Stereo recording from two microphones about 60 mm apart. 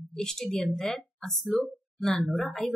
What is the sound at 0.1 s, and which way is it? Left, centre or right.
A woman's voice, centre.